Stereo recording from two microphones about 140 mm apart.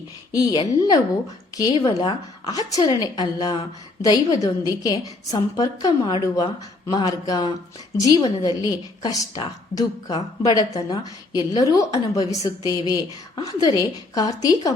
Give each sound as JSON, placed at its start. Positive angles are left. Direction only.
{"t": 0.3, "sound": "a woman's voice", "side_deg": 25}